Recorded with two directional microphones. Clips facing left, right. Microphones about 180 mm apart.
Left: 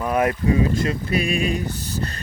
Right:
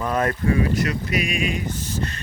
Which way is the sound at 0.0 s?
10° left (ahead or behind).